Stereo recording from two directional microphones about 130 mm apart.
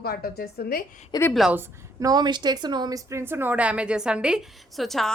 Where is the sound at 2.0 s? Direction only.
30° right (ahead or behind).